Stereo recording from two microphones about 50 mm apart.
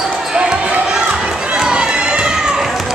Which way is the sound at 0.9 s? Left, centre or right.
Centre.